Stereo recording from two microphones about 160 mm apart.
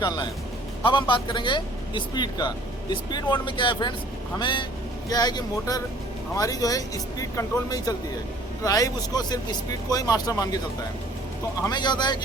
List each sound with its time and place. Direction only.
0.9 s speech: 30° left (ahead or behind)
11.6 s speech: 25° left (ahead or behind)